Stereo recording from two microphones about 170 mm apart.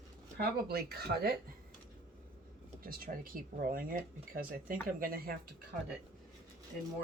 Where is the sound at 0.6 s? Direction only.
70° right (ahead or behind).